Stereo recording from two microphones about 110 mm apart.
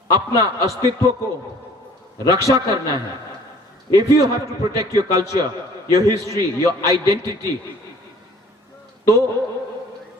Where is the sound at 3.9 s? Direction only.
30° right (ahead or behind).